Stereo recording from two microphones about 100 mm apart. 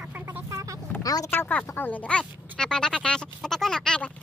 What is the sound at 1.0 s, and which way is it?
Speech, 35° left (ahead or behind).